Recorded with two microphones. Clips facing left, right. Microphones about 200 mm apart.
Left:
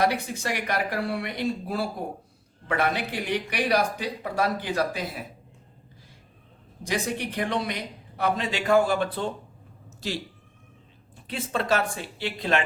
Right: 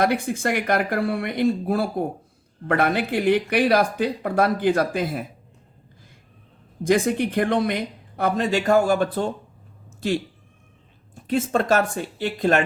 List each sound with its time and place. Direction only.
0.0 s speech: 50° right (ahead or behind)
6.8 s speech: 50° right (ahead or behind)